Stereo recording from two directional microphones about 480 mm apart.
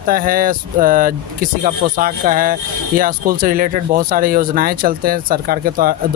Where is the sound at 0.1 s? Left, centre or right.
Centre.